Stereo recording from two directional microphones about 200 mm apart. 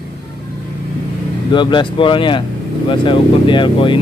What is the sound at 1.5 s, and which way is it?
Speech, 20° left (ahead or behind).